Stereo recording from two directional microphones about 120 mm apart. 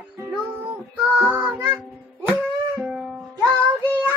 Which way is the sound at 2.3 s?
10° right (ahead or behind).